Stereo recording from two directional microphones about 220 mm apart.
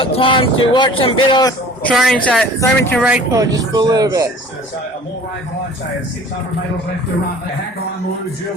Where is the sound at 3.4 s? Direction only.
15° right (ahead or behind).